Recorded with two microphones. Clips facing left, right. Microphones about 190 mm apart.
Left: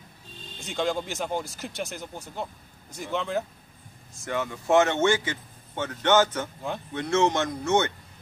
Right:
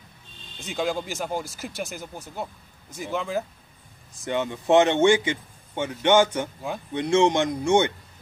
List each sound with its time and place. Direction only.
0.6 s speech: centre (ahead or behind)
4.2 s speech: 20° right (ahead or behind)